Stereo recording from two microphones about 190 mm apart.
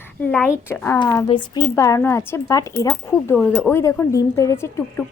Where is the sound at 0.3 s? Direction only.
10° left (ahead or behind).